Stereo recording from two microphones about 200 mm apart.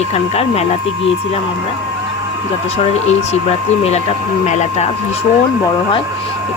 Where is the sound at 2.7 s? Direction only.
35° left (ahead or behind).